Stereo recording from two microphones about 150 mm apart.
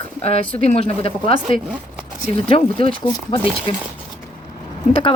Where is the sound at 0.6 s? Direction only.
40° left (ahead or behind).